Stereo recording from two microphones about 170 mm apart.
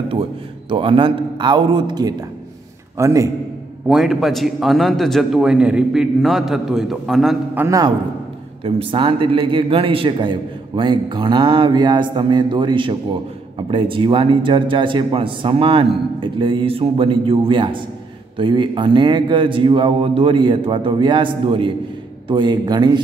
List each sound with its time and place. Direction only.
0.1 s a man's voice: 30° right (ahead or behind)
3.9 s a man's voice: centre (ahead or behind)
7.5 s a man's voice: 15° right (ahead or behind)
8.6 s a man's voice: 30° right (ahead or behind)